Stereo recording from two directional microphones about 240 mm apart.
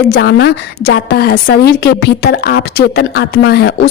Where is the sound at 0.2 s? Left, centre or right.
Left.